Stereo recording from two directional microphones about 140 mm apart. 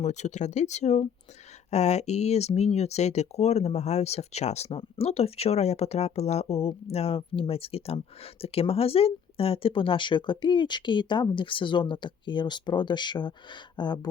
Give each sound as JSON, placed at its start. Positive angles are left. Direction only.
{"t": 0.0, "sound": "speech", "side_deg": 55}